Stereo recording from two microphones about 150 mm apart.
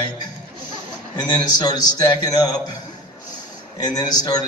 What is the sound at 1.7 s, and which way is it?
Speech, 25° left (ahead or behind).